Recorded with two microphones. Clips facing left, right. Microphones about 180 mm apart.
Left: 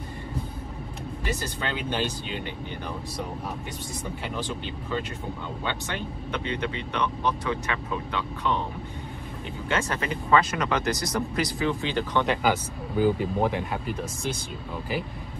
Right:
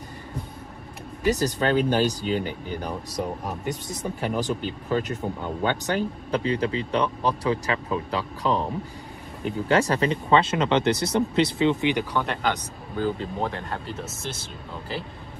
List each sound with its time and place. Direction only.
1.3 s speech: 40° right (ahead or behind)
9.7 s speech: 35° right (ahead or behind); by 12.5 s centre (ahead or behind)
12.9 s speech: 15° left (ahead or behind)